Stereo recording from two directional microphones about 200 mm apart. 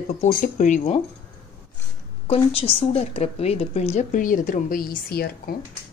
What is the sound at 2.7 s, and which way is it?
A woman's voice, 30° left (ahead or behind).